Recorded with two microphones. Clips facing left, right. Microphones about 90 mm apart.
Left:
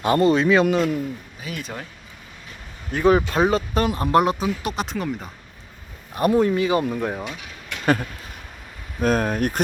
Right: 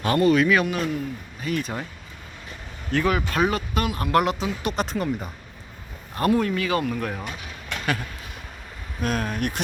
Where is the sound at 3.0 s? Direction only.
25° left (ahead or behind).